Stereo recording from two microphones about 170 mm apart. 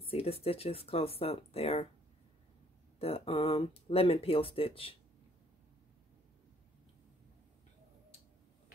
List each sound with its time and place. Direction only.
0.0 s speech: 35° left (ahead or behind)
3.0 s speech: 35° left (ahead or behind)